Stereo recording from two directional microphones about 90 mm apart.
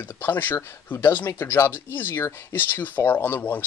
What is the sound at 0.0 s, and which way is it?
Speech, 25° left (ahead or behind).